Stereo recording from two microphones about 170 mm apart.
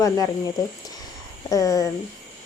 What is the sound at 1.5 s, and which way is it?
Speech, 20° left (ahead or behind).